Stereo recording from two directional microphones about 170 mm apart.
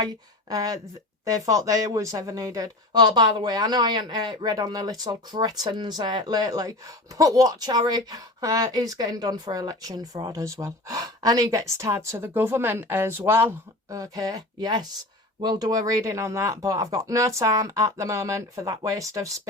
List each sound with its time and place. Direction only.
0.0 s a woman's voice: 20° right (ahead or behind)